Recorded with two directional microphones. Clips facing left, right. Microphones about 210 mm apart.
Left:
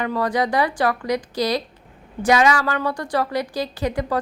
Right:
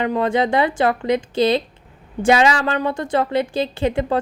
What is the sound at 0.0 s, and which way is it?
A woman's voice, 25° right (ahead or behind).